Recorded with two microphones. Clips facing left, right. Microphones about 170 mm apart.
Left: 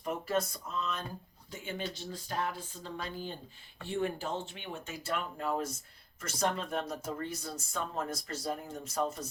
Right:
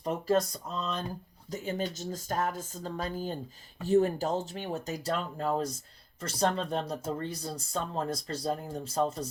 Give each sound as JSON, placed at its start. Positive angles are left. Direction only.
{"t": 0.0, "sound": "speech", "side_deg": -35}
{"t": 1.5, "sound": "speech", "side_deg": -40}